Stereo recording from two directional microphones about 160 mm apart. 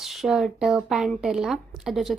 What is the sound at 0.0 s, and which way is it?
A woman's voice, centre (ahead or behind).